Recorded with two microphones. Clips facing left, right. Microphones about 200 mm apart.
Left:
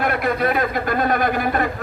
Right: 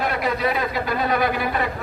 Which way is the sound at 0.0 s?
55° left (ahead or behind).